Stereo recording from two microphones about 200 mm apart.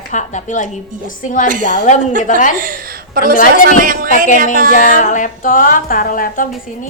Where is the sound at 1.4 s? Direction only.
40° right (ahead or behind).